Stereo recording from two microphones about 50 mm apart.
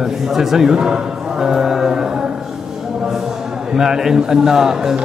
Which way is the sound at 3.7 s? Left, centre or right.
Centre.